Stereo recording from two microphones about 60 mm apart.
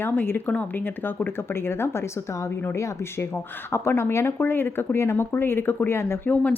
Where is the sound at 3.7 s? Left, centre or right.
Left.